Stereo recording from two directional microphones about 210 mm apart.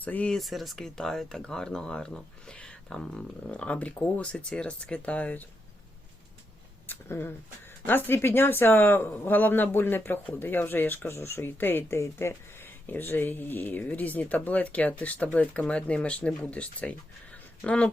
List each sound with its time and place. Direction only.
0.0 s speech: 5° left (ahead or behind)
6.8 s speech: 10° left (ahead or behind)